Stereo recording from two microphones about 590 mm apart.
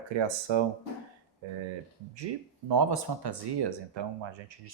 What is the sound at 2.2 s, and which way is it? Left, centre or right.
Speech, right.